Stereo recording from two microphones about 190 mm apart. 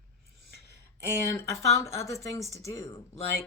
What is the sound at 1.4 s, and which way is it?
A woman's voice, 15° left (ahead or behind).